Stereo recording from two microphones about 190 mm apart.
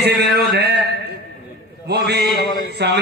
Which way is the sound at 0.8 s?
55° right (ahead or behind).